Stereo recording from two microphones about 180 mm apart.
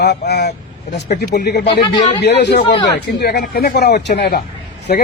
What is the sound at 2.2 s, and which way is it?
A man's voice, 70° left (ahead or behind).